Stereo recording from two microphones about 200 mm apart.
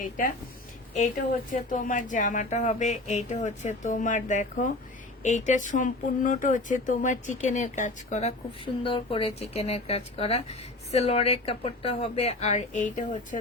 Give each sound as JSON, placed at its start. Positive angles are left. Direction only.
{"t": 1.5, "sound": "speech", "side_deg": 40}